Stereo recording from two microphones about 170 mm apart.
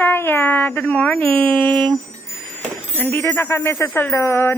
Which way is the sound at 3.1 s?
10° left (ahead or behind).